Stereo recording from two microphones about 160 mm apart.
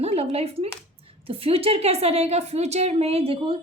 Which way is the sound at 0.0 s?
40° right (ahead or behind).